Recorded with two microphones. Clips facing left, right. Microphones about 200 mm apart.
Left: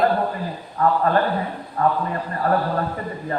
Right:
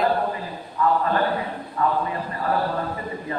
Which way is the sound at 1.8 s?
40° left (ahead or behind).